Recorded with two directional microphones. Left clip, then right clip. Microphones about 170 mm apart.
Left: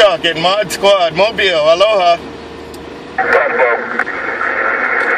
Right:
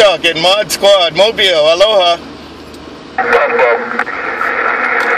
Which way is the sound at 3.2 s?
45° right (ahead or behind).